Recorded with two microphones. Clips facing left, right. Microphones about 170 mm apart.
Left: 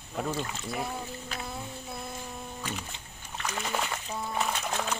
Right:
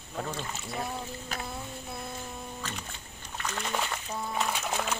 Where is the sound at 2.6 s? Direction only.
10° left (ahead or behind).